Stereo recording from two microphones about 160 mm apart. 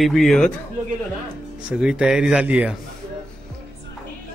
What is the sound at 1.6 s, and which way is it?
Speech, 5° right (ahead or behind).